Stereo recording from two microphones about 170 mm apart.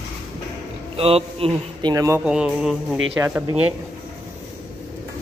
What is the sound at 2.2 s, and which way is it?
Speech, 5° right (ahead or behind).